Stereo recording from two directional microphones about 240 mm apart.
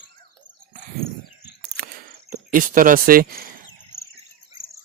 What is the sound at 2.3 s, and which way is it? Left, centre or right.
Speech, right.